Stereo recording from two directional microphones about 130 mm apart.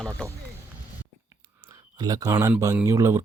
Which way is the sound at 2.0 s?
30° right (ahead or behind).